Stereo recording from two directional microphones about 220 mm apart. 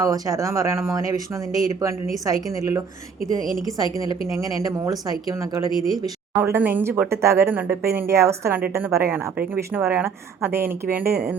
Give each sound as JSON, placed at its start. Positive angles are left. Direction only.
{"t": 0.0, "sound": "speech", "side_deg": -15}